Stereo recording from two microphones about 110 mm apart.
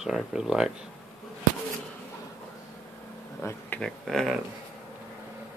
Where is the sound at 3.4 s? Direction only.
25° left (ahead or behind).